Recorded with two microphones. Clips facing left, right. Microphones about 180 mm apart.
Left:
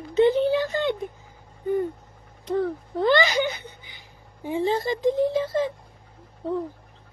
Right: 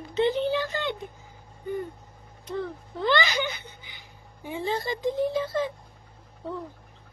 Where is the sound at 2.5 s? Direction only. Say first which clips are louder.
Left 7 dB; 45° left (ahead or behind).